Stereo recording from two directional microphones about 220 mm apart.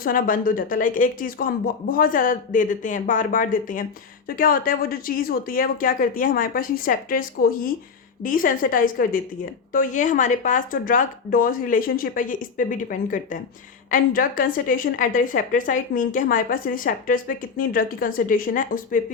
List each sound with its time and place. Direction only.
0.0 s a woman's voice: 40° left (ahead or behind)